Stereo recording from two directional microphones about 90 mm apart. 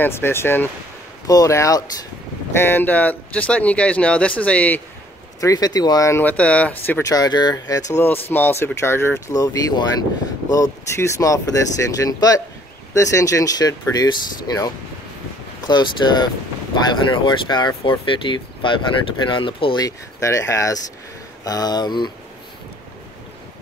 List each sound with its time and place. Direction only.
0.0 s speech: 25° left (ahead or behind)
1.2 s speech: 40° left (ahead or behind)
2.5 s speech: 25° left (ahead or behind)
5.4 s speech: 45° left (ahead or behind)
6.1 s speech: 15° left (ahead or behind)
7.0 s speech: 45° left (ahead or behind)
7.9 s speech: 25° left (ahead or behind)
9.3 s speech: 40° left (ahead or behind)
11.0 s speech: 35° left (ahead or behind); by 19.8 s 65° left (ahead or behind)
19.8 s speech: 35° left (ahead or behind); by 22.1 s 50° left (ahead or behind)